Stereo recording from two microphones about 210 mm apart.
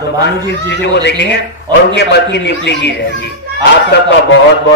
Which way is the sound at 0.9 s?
55° left (ahead or behind).